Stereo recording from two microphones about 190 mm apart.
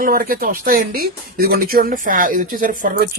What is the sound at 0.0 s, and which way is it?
Speech, 50° right (ahead or behind).